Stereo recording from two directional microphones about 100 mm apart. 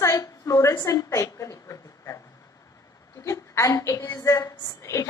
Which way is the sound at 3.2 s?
30° left (ahead or behind).